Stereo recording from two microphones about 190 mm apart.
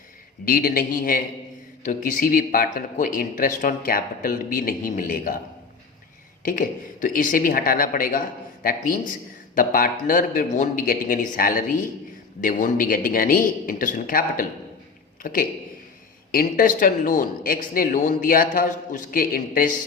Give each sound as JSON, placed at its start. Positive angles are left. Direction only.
{"t": 0.4, "sound": "speech", "side_deg": 50}
{"t": 6.4, "sound": "a man's voice", "side_deg": 45}